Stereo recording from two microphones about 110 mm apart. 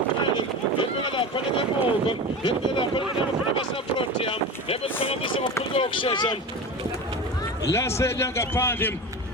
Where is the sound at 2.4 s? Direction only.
50° left (ahead or behind).